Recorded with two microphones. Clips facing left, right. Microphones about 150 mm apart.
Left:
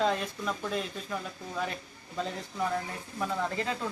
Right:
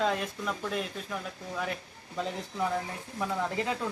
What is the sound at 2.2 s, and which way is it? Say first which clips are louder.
Speech: right 1 dB; 15° right (ahead or behind).